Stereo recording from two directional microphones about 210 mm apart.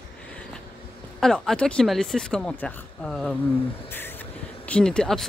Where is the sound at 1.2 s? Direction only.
Centre (ahead or behind).